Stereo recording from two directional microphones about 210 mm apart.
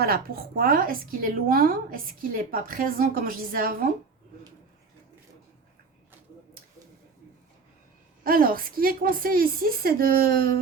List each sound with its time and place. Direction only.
0.0 s a woman's voice: 45° right (ahead or behind)
8.2 s a woman's voice: 45° right (ahead or behind)